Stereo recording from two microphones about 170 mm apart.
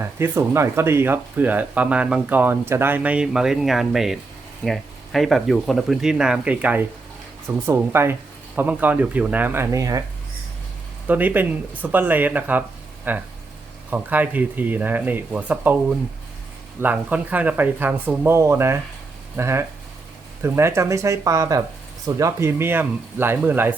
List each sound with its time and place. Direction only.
0.0 s speech: 15° right (ahead or behind)
11.1 s speech: 10° right (ahead or behind)